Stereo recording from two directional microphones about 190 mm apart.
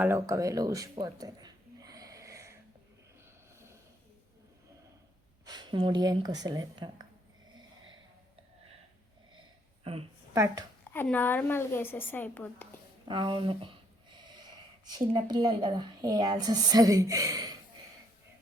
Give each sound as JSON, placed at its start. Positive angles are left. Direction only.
{"t": 0.0, "sound": "a sound", "side_deg": -15}
{"t": 5.5, "sound": "speech", "side_deg": -25}
{"t": 9.8, "sound": "a woman's voice", "side_deg": -30}
{"t": 10.3, "sound": "speech", "side_deg": -20}
{"t": 10.9, "sound": "a woman's voice", "side_deg": 10}
{"t": 13.1, "sound": "speech", "side_deg": -25}